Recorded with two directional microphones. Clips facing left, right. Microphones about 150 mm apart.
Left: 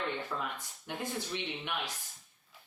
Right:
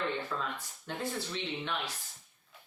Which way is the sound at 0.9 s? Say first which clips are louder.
Right 1 dB; 15° left (ahead or behind).